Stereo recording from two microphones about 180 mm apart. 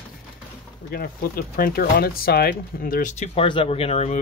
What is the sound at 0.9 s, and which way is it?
Speech, 55° left (ahead or behind).